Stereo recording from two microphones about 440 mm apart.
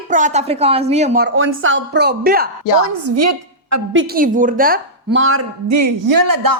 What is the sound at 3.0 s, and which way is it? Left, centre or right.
A woman's voice, right.